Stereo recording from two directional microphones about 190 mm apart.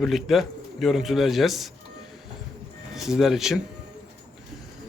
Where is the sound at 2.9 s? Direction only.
Centre (ahead or behind).